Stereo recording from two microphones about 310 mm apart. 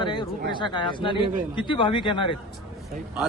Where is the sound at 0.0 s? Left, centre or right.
Centre.